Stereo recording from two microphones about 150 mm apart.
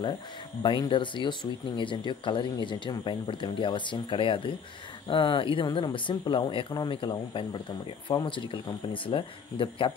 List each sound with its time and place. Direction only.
0.6 s speech: 30° left (ahead or behind)